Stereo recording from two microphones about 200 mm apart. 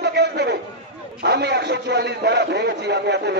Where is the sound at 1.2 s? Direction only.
55° right (ahead or behind).